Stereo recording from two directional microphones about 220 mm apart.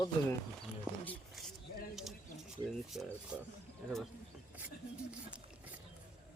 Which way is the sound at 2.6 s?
Centre (ahead or behind).